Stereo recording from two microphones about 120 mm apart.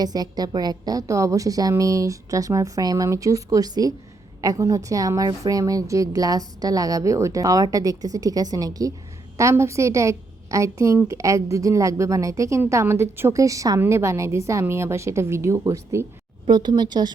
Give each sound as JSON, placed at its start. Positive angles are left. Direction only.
{"t": 0.0, "sound": "a woman's voice", "side_deg": -35}
{"t": 16.5, "sound": "a woman's voice", "side_deg": -40}